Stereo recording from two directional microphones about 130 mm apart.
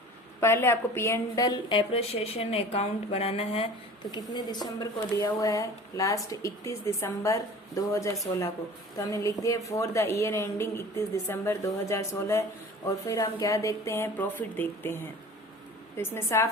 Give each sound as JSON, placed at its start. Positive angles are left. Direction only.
{"t": 0.3, "sound": "a woman's voice", "side_deg": 20}
{"t": 1.9, "sound": "a woman's voice", "side_deg": 50}
{"t": 4.1, "sound": "speech", "side_deg": 35}
{"t": 16.0, "sound": "speech", "side_deg": 20}